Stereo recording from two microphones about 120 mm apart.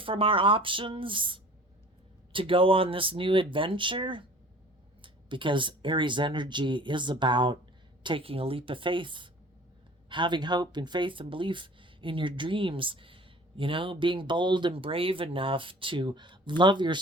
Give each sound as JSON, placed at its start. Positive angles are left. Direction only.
{"t": 0.0, "sound": "speech", "side_deg": -45}